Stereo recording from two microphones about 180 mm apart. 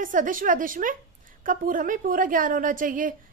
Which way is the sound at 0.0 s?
45° right (ahead or behind).